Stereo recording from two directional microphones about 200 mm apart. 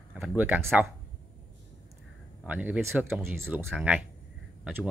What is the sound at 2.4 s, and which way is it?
Speech, 5° right (ahead or behind).